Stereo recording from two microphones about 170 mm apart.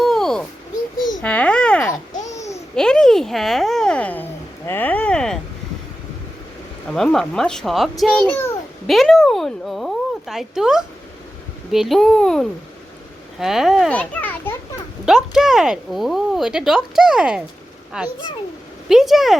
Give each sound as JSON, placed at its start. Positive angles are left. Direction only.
{"t": 0.0, "sound": "a sound", "side_deg": 0}
{"t": 1.2, "sound": "babbling", "side_deg": 10}
{"t": 2.3, "sound": "babbling", "side_deg": 20}
{"t": 2.7, "sound": "a sound", "side_deg": 5}
{"t": 6.9, "sound": "a child's voice", "side_deg": 5}
{"t": 15.0, "sound": "speech", "side_deg": -5}